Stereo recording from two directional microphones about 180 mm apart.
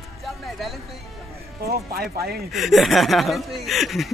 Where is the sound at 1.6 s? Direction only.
60° right (ahead or behind).